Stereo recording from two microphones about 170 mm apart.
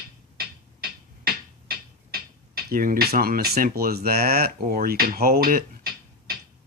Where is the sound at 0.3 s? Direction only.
65° right (ahead or behind).